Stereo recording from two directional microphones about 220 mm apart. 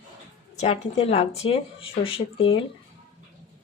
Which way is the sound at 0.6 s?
30° left (ahead or behind).